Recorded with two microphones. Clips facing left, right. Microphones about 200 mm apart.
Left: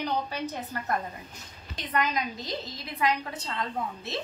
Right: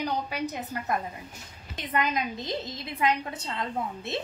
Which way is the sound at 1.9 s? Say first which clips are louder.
Right 1 dB; 20° right (ahead or behind).